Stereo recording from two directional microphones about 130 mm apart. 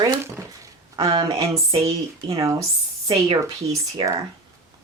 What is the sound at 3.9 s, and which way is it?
Speech, 30° right (ahead or behind).